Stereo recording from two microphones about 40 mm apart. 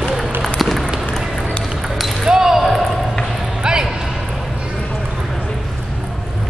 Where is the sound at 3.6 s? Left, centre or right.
Centre.